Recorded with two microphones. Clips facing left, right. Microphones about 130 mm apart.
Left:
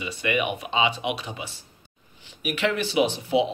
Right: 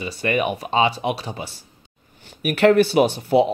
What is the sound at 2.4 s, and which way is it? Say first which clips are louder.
Speech: right 10 dB; 50° right (ahead or behind).